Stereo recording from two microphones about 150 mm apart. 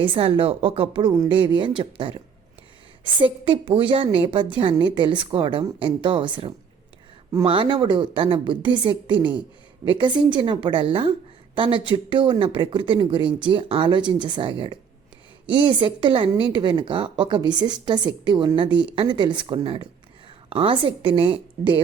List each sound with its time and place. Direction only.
0.0 s a woman's voice: 35° right (ahead or behind)